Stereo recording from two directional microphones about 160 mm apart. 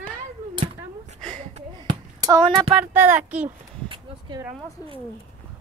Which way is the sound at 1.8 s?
25° right (ahead or behind).